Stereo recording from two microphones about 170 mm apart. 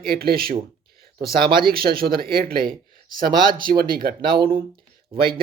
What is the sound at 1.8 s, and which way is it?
Speech, 60° right (ahead or behind).